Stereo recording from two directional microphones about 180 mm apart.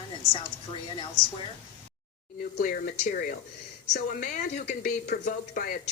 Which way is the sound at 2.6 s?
50° left (ahead or behind).